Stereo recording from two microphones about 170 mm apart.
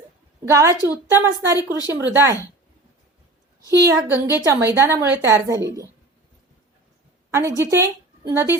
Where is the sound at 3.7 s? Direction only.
20° right (ahead or behind).